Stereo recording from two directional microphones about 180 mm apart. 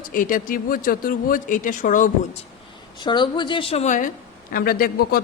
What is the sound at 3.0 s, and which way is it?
A woman's voice, 25° left (ahead or behind).